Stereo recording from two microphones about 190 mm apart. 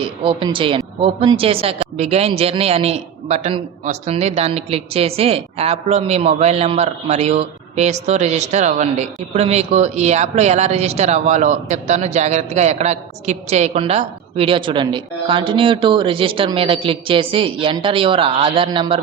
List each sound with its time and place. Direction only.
0.0 s a woman's voice: 25° right (ahead or behind)